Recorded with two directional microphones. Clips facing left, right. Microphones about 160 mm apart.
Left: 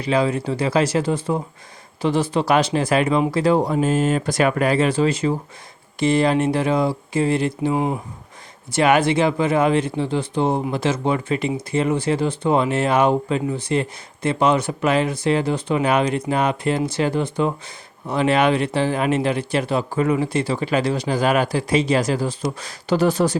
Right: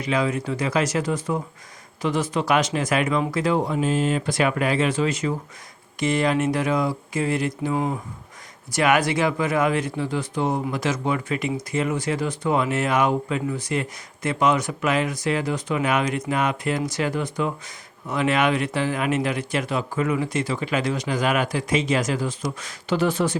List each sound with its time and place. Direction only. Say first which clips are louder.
0.0 s speech: left 4 dB; 30° left (ahead or behind)